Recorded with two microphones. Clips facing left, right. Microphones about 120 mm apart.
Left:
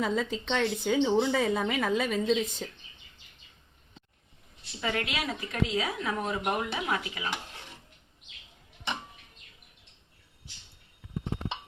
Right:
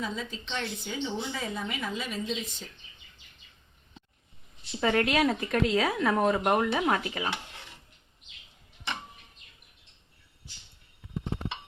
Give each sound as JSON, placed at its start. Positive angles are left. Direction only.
{"t": 0.0, "sound": "a woman's voice", "side_deg": 80}
{"t": 4.8, "sound": "speech", "side_deg": -45}